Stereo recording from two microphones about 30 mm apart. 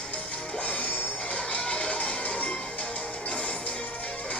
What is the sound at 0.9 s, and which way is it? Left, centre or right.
Music, left.